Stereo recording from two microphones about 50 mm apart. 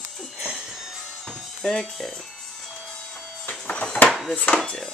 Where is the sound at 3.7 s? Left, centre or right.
Left.